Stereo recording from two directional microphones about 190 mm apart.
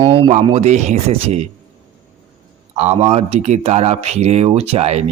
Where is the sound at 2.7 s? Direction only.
35° right (ahead or behind).